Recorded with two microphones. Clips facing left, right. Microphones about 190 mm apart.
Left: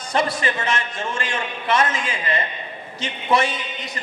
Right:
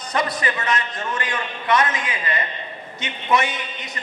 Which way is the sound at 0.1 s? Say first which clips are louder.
Left 2 dB; 30° left (ahead or behind).